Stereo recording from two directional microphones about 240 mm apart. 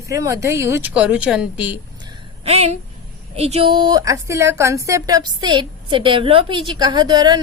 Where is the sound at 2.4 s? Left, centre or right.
Right.